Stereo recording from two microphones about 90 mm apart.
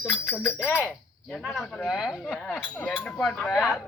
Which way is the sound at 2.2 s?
20° left (ahead or behind).